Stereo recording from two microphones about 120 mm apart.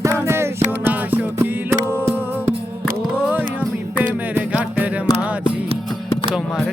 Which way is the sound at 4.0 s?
10° right (ahead or behind).